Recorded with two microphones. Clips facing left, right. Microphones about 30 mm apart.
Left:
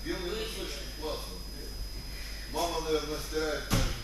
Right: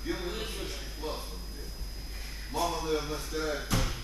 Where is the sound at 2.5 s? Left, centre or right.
Centre.